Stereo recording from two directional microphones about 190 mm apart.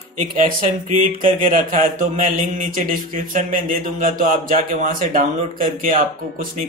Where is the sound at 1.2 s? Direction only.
45° right (ahead or behind).